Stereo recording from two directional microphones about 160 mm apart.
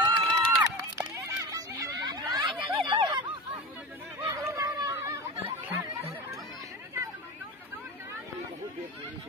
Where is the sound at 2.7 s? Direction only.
30° right (ahead or behind).